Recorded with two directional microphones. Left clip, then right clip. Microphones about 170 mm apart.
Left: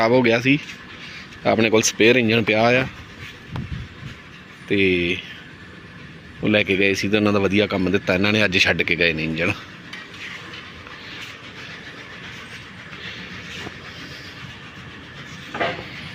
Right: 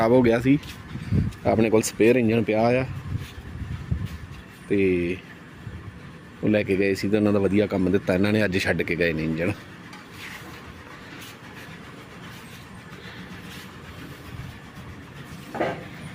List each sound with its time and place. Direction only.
0.0 s speech: 20° right (ahead or behind)
4.7 s speech: 5° right (ahead or behind)
6.4 s speech: 10° right (ahead or behind)